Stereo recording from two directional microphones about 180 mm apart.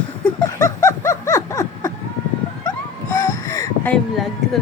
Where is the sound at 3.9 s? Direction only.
Centre (ahead or behind).